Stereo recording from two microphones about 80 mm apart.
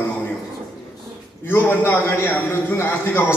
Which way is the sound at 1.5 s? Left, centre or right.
Left.